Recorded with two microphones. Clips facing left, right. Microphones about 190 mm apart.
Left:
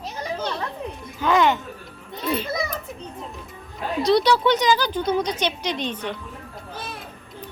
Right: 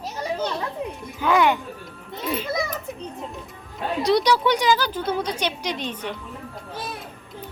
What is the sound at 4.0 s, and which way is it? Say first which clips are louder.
Speech: left 1 dB; 15° right (ahead or behind).